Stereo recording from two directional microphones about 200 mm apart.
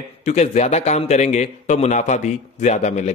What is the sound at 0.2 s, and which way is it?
A man's voice, 35° left (ahead or behind).